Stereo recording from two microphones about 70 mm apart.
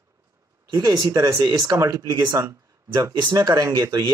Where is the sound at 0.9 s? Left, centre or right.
Right.